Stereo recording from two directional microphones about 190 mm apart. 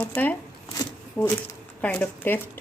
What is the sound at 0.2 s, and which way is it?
Speech, 10° left (ahead or behind).